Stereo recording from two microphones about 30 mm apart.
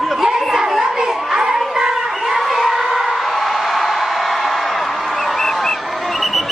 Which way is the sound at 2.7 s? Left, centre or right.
Centre.